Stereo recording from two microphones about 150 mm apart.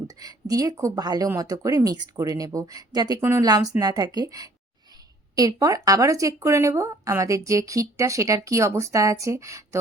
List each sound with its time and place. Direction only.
0.2 s a woman's voice: 25° right (ahead or behind)